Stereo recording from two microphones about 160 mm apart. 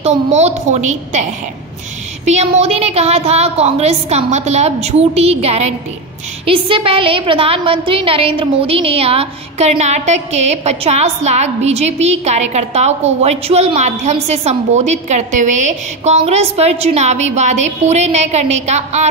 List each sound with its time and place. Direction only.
0.0 s a woman's voice: 45° right (ahead or behind)
2.2 s a woman's voice: 45° right (ahead or behind)